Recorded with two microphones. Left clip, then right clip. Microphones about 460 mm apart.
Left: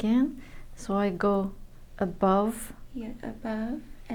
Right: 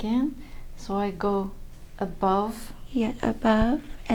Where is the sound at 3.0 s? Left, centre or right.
Right.